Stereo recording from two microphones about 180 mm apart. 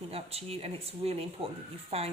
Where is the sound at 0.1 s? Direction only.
35° right (ahead or behind).